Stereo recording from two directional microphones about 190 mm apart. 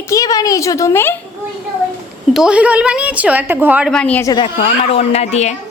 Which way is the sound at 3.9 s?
5° left (ahead or behind).